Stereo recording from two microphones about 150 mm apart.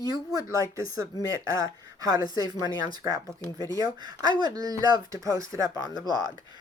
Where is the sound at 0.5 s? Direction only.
20° right (ahead or behind).